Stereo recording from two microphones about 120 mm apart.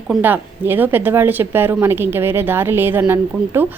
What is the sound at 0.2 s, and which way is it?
Speech, 15° right (ahead or behind).